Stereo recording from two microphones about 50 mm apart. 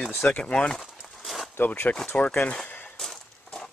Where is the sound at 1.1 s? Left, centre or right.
Centre.